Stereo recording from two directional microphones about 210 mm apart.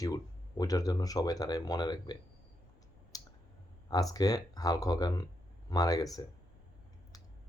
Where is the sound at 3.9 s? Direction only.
15° left (ahead or behind).